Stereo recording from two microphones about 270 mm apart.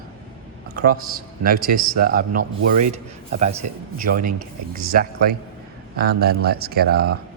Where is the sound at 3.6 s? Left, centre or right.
Right.